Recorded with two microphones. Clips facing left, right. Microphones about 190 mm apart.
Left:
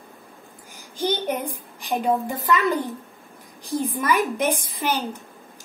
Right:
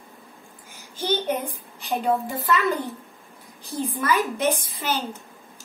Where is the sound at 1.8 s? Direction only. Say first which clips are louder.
Left 1 dB; 15° left (ahead or behind).